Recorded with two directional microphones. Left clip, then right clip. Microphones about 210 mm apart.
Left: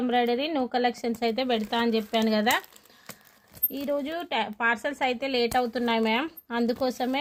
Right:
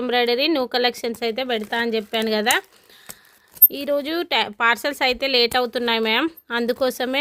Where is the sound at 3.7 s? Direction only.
55° right (ahead or behind).